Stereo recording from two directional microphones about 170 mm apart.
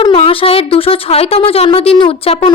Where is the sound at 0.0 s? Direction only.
35° left (ahead or behind).